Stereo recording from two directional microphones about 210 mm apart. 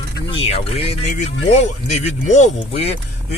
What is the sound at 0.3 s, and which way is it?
Speech, 30° left (ahead or behind).